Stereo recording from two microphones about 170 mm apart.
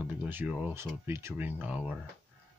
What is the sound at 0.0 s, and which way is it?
Speech, 10° right (ahead or behind).